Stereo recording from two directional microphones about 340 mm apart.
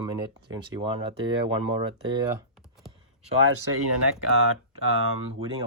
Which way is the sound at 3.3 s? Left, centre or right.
Right.